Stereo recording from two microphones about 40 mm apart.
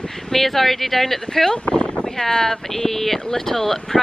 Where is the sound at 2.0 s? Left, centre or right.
Centre.